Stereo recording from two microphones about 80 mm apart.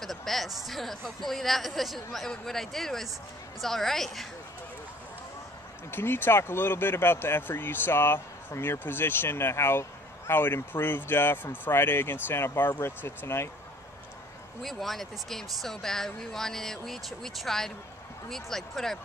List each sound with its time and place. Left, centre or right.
0.0 s speech: centre
5.9 s speech: left
14.6 s speech: centre